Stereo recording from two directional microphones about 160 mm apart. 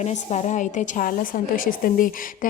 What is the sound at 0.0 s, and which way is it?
A woman's voice, 45° left (ahead or behind).